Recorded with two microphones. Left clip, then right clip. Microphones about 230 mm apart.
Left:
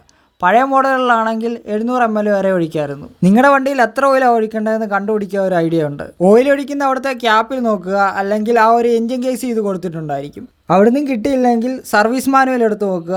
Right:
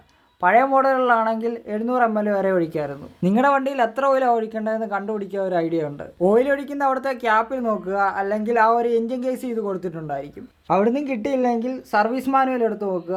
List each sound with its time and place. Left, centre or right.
0.4 s speech: left